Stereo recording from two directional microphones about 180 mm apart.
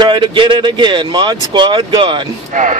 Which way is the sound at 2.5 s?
45° right (ahead or behind).